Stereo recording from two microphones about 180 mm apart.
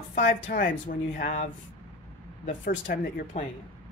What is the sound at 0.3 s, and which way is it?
Speech, 50° left (ahead or behind).